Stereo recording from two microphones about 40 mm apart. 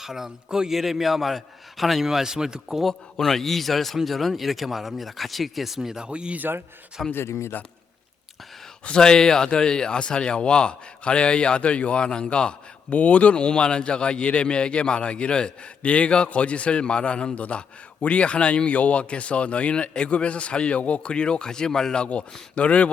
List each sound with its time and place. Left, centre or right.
0.0 s a man's voice: centre
3.2 s speech: centre
6.0 s speech: right
7.1 s speech: left
9.0 s a man's voice: centre
22.0 s speech: left